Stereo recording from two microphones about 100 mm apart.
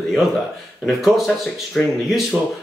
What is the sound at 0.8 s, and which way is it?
Speech, centre (ahead or behind).